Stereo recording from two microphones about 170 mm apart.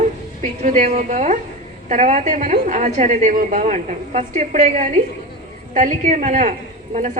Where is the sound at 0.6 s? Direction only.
45° right (ahead or behind).